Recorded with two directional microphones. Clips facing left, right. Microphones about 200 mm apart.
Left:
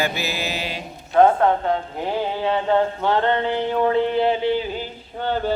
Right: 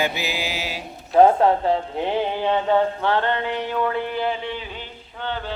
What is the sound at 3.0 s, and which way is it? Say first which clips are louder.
Mantra: left 2 dB; 15° left (ahead or behind).